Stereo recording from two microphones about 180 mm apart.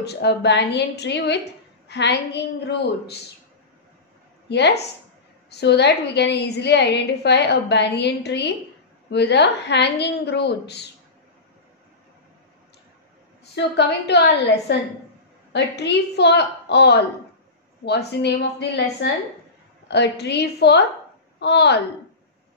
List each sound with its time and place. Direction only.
0.0 s a woman's voice: 70° left (ahead or behind)
4.5 s a woman's voice: 70° left (ahead or behind)
13.6 s a woman's voice: 70° left (ahead or behind)